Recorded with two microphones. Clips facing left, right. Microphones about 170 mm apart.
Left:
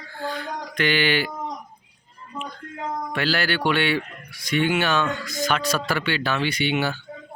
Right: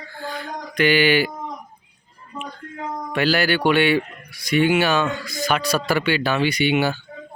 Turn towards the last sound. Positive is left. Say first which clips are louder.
# right 4 dB
turn(degrees=-10)  # may be behind; listen again after turning